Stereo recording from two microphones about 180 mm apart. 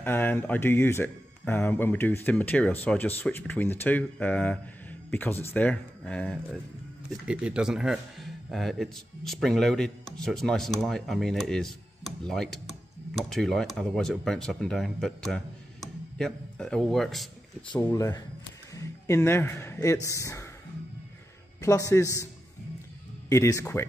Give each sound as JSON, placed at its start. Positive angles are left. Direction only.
{"t": 0.0, "sound": "speech", "side_deg": 10}
{"t": 7.2, "sound": "a man's voice", "side_deg": -5}
{"t": 17.7, "sound": "speech", "side_deg": 15}
{"t": 21.5, "sound": "speech", "side_deg": 15}
{"t": 23.2, "sound": "speech", "side_deg": 15}